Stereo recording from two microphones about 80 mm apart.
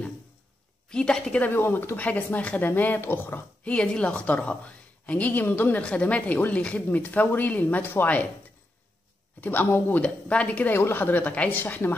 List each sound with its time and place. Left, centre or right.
0.8 s a woman's voice: centre
1.5 s speech: left
3.7 s a woman's voice: centre
9.4 s speech: left
10.7 s speech: left